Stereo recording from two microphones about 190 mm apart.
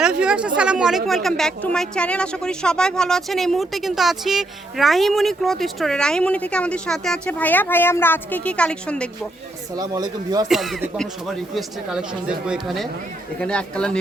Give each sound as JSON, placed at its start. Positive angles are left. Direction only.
{"t": 0.0, "sound": "speech", "side_deg": -5}
{"t": 9.7, "sound": "speech", "side_deg": -20}
{"t": 10.5, "sound": "speech", "side_deg": 0}